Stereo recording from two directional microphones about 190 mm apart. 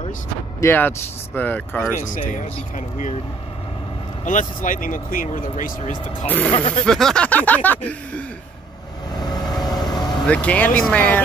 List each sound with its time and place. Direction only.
0.6 s speech: 10° left (ahead or behind)
4.2 s speech: 40° left (ahead or behind)
6.2 s speech: 10° left (ahead or behind)
6.5 s speech: 30° left (ahead or behind)
6.9 s speech: 5° left (ahead or behind)
9.2 s vehicle: 20° left (ahead or behind)
10.2 s speech: 5° left (ahead or behind)